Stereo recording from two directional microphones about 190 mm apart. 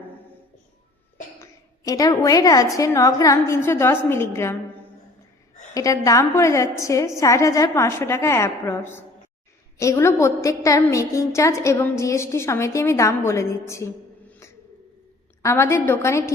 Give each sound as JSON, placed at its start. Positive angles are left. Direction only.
{"t": 1.4, "sound": "a woman's voice", "side_deg": 15}
{"t": 5.7, "sound": "a woman's voice", "side_deg": 15}